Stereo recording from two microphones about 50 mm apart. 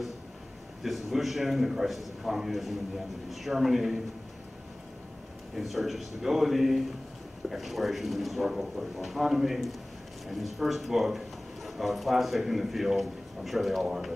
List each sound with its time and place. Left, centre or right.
0.8 s speech: centre
5.6 s speech: centre